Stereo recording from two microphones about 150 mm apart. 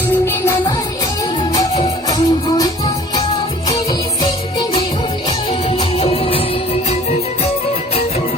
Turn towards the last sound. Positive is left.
turn(degrees=40)  # may be behind; listen again after turning